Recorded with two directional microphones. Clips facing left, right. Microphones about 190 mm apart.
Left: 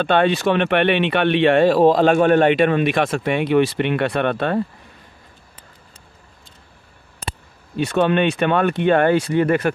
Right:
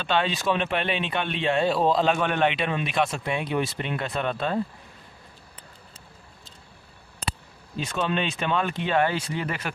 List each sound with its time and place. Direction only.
0.0 s speech: 55° left (ahead or behind)
7.7 s speech: 65° left (ahead or behind)